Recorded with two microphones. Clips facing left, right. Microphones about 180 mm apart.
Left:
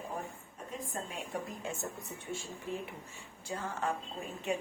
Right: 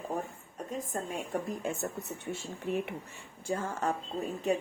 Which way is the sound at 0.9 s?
50° right (ahead or behind).